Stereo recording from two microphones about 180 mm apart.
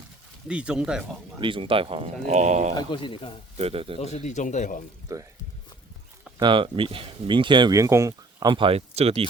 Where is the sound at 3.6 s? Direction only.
30° right (ahead or behind).